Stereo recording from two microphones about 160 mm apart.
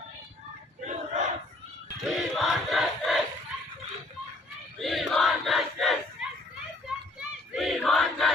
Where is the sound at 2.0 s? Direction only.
Centre (ahead or behind).